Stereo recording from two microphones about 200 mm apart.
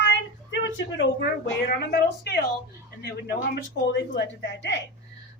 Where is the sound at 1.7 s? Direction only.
50° left (ahead or behind).